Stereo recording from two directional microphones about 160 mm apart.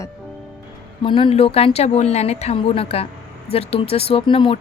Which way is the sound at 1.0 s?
35° left (ahead or behind).